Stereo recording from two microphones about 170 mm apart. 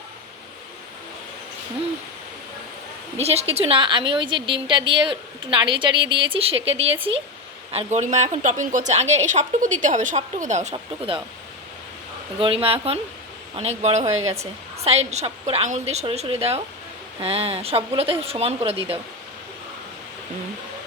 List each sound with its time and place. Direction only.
3.2 s a woman's voice: 35° right (ahead or behind)
12.4 s a woman's voice: 35° right (ahead or behind)